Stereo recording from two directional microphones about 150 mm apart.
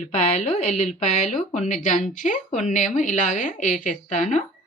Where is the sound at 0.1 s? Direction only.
50° left (ahead or behind).